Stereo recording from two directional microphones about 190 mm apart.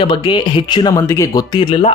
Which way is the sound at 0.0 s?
25° left (ahead or behind).